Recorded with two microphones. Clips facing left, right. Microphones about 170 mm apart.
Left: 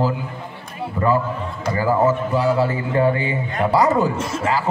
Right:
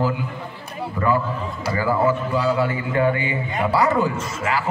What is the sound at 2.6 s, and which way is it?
Speech, 35° left (ahead or behind).